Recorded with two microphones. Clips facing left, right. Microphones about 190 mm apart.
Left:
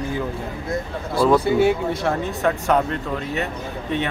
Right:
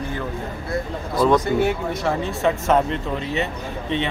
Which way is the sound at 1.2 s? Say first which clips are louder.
Left 2 dB; 5° left (ahead or behind).